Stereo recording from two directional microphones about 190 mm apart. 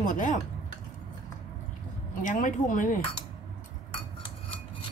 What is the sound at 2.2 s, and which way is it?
Speech, 45° left (ahead or behind).